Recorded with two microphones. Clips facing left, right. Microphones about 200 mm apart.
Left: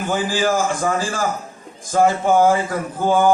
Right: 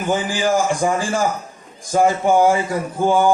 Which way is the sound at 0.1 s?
15° right (ahead or behind).